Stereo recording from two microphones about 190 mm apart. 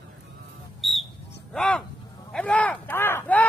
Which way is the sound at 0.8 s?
Centre (ahead or behind).